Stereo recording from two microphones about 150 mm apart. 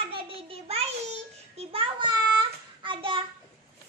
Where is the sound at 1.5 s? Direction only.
35° right (ahead or behind).